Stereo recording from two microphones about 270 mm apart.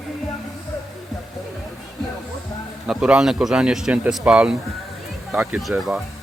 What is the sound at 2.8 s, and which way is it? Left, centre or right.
A man's voice, centre.